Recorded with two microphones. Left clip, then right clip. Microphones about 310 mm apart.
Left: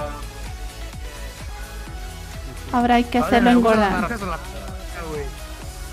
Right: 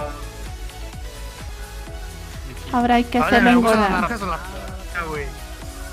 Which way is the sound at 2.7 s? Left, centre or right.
Centre.